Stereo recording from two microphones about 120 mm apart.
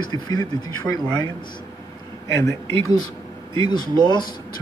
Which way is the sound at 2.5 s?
30° left (ahead or behind).